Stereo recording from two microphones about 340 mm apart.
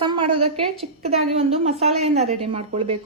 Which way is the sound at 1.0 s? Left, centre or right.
Centre.